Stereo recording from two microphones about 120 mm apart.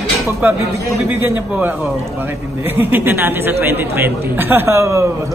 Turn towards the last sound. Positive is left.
turn(degrees=-25)  # may be behind; listen again after turning